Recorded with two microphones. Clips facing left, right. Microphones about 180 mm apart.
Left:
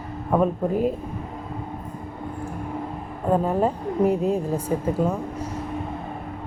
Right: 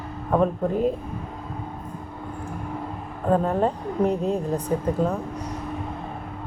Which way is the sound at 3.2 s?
10° left (ahead or behind).